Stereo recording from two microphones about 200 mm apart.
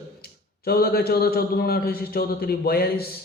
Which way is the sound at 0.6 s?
50° left (ahead or behind).